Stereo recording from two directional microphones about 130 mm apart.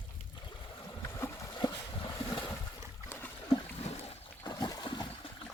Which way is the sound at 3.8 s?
50° left (ahead or behind).